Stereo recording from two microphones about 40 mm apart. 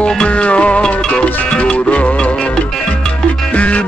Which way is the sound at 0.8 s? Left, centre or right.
Left.